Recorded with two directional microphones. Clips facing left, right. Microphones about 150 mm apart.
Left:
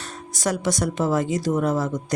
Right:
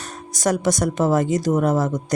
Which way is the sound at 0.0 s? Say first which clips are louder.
Right 4 dB; 45° right (ahead or behind).